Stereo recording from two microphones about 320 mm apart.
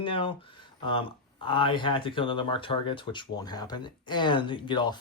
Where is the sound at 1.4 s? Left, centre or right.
Centre.